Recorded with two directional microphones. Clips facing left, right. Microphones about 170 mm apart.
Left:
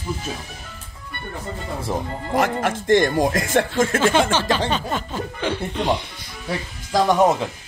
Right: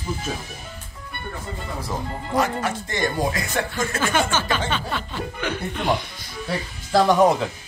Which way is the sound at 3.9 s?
30° left (ahead or behind).